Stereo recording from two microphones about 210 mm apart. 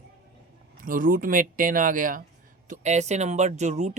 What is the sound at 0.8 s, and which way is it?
Speech, 40° right (ahead or behind).